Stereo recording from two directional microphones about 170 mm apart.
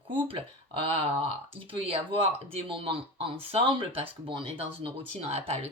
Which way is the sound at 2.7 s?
30° right (ahead or behind).